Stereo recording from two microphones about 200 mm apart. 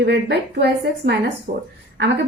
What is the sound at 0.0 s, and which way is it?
Speech, 55° right (ahead or behind).